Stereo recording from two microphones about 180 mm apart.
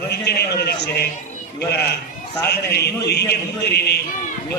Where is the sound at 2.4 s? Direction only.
65° left (ahead or behind).